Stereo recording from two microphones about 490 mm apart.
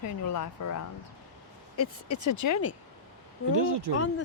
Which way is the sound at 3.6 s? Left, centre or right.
Right.